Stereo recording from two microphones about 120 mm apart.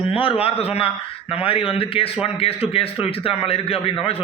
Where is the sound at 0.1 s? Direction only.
50° left (ahead or behind).